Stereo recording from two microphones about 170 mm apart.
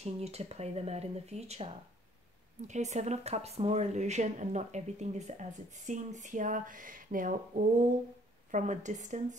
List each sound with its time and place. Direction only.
0.0 s speech: 40° right (ahead or behind)